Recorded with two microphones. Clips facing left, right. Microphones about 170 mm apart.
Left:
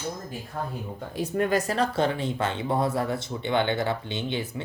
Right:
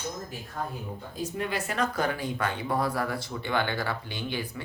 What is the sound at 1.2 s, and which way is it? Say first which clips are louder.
Speech: left 7 dB; 50° left (ahead or behind).